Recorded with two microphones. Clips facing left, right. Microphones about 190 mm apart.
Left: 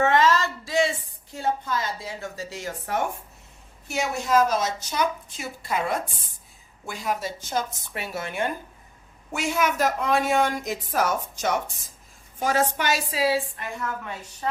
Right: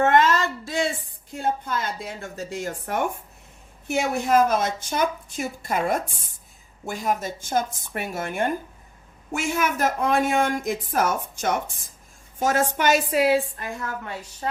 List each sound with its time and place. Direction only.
0.0 s a woman's voice: 55° right (ahead or behind)